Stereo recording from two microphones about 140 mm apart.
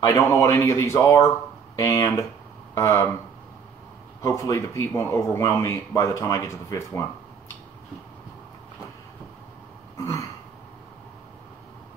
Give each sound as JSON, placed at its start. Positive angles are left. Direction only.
{"t": 0.0, "sound": "speech", "side_deg": 20}
{"t": 4.2, "sound": "speech", "side_deg": 20}
{"t": 9.9, "sound": "throat clearing", "side_deg": 20}